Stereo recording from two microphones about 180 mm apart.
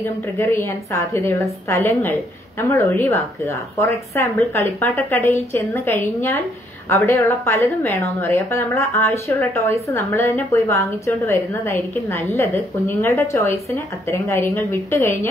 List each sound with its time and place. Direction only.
0.0 s a woman's voice: 15° left (ahead or behind)